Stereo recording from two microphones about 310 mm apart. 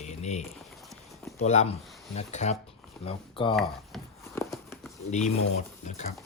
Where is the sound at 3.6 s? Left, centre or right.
Centre.